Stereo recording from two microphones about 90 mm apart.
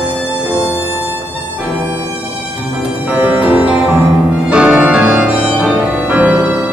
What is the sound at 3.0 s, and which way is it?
Music, 15° right (ahead or behind).